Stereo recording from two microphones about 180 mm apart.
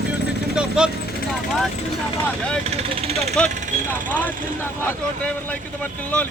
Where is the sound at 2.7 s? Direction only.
35° right (ahead or behind).